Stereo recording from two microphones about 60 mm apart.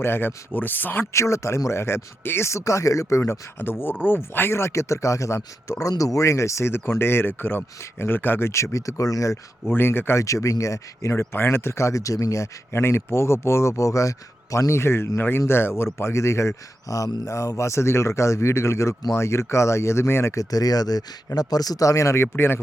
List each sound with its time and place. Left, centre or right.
0.0 s speech: left
1.1 s speech: left
5.8 s speech: left
9.6 s speech: left
10.2 s speech: left
12.7 s speech: left
20.3 s speech: left